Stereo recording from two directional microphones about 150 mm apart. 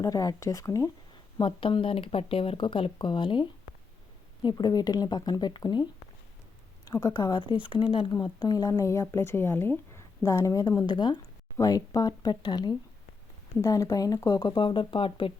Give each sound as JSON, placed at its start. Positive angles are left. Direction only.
{"t": 0.0, "sound": "speech", "side_deg": 25}
{"t": 1.4, "sound": "speech", "side_deg": 35}